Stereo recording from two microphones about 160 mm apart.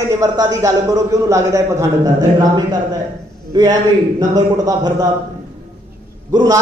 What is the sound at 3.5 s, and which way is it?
A man's voice, 25° right (ahead or behind).